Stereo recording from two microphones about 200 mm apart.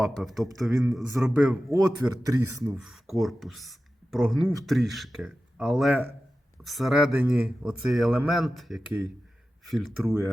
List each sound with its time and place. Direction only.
0.0 s speech: centre (ahead or behind); by 2.7 s 15° right (ahead or behind)
2.7 s speech: centre (ahead or behind)